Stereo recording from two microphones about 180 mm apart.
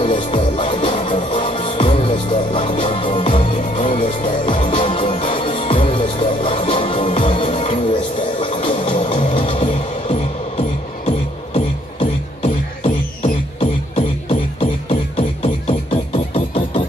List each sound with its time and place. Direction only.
0.0 s music: 30° left (ahead or behind)